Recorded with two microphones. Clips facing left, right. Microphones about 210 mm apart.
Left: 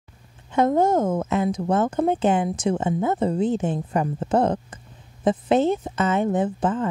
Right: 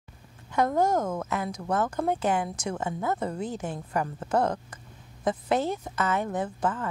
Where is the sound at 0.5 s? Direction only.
25° left (ahead or behind).